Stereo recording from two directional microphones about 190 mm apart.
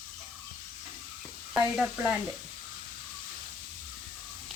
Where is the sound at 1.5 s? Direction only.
5° right (ahead or behind).